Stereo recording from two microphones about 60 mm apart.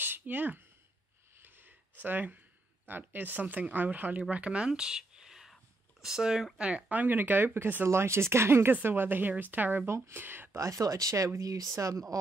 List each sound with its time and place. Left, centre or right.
0.0 s a sound: right
2.0 s speech: right
9.8 s speech: right
10.5 s speech: right